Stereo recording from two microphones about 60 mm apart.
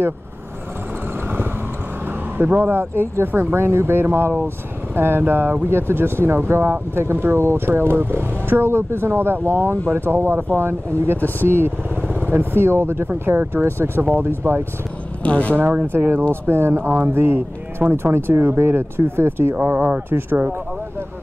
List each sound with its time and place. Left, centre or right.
2.3 s speech: right
11.1 s speech: left
11.4 s speech: right
12.0 s speech: right
15.2 s speech: left
15.5 s speech: right